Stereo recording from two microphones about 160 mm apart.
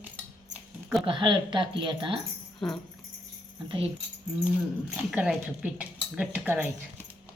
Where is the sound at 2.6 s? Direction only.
5° left (ahead or behind).